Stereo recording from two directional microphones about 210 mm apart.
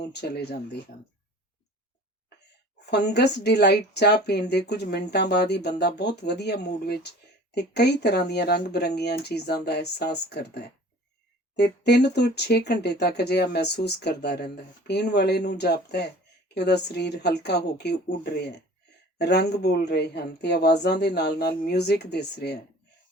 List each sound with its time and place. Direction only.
0.0 s speech: 50° left (ahead or behind)
2.9 s speech: 55° left (ahead or behind)